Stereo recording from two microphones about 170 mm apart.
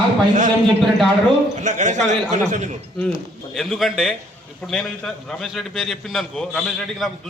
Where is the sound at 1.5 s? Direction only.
45° right (ahead or behind).